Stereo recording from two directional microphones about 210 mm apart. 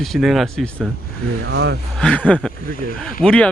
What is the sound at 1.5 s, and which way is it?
Speech, 55° right (ahead or behind).